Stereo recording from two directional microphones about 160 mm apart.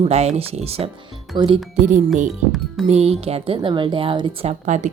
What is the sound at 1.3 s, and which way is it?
Speech, 25° right (ahead or behind).